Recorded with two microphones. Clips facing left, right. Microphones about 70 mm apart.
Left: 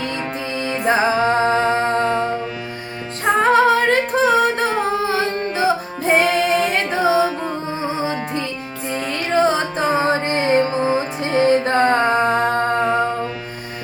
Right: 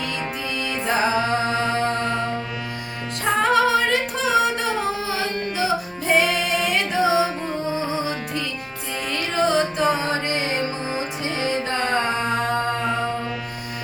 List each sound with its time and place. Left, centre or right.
0.6 s music: left
3.4 s singing: left
6.1 s music: left